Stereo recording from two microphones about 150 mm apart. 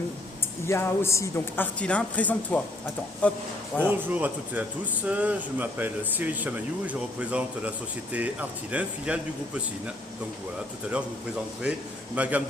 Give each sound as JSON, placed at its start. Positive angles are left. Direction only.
{"t": 0.7, "sound": "speech", "side_deg": 20}
{"t": 1.8, "sound": "speech", "side_deg": 10}
{"t": 3.8, "sound": "speech", "side_deg": -10}
{"t": 12.1, "sound": "speech", "side_deg": -10}